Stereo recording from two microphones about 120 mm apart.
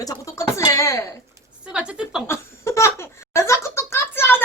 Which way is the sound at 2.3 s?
25° left (ahead or behind).